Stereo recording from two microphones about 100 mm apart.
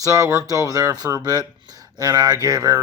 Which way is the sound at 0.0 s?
35° right (ahead or behind).